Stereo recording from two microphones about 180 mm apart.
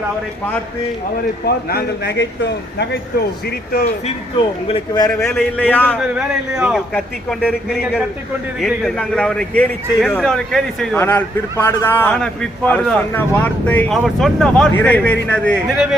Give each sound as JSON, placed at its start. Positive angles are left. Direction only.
{"t": 1.5, "sound": "a man's voice", "side_deg": 65}
{"t": 4.0, "sound": "a man's voice", "side_deg": 30}
{"t": 5.3, "sound": "a man's voice", "side_deg": 5}
{"t": 6.0, "sound": "a man's voice", "side_deg": -5}
{"t": 11.0, "sound": "a man's voice", "side_deg": 15}